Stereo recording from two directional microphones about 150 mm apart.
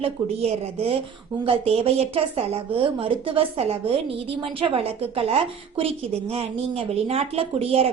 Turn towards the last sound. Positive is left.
turn(degrees=-40)  # may be behind; listen again after turning